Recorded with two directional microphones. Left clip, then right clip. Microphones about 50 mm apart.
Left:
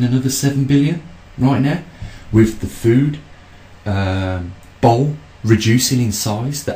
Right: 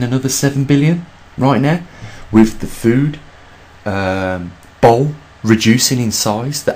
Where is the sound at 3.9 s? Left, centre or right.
Right.